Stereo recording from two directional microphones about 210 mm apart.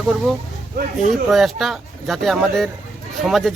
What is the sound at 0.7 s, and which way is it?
Speech, 40° right (ahead or behind).